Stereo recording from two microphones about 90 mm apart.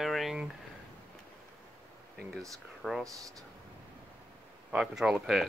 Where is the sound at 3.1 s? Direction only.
40° right (ahead or behind).